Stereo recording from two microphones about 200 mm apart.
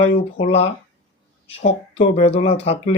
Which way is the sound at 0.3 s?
30° left (ahead or behind).